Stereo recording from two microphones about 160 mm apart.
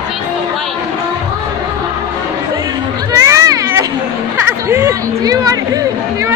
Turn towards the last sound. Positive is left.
turn(degrees=-20)  # may be behind; listen again after turning